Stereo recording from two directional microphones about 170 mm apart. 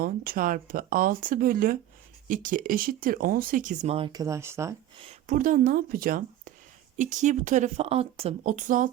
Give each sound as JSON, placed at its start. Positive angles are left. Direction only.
{"t": 0.0, "sound": "speech", "side_deg": -55}
{"t": 5.2, "sound": "speech", "side_deg": -50}